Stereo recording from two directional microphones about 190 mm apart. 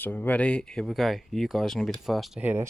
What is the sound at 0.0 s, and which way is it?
Speech, 10° left (ahead or behind).